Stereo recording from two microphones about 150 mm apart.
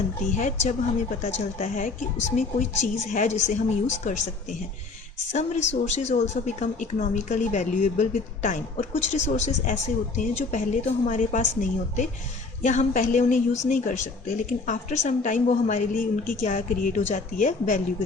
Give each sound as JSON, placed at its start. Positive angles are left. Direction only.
{"t": 0.3, "sound": "a woman's voice", "side_deg": 55}
{"t": 5.3, "sound": "a woman's voice", "side_deg": 50}